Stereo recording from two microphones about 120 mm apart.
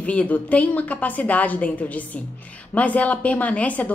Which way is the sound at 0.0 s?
10° left (ahead or behind).